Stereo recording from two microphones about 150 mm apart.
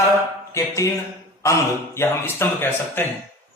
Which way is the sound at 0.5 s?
20° left (ahead or behind).